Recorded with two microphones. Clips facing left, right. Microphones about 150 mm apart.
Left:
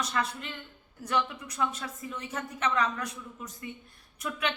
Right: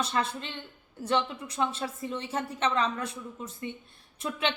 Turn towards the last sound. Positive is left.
turn(degrees=-25)  # may be behind; listen again after turning